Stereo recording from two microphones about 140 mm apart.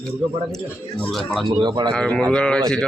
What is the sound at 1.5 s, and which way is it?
Speech, 35° right (ahead or behind).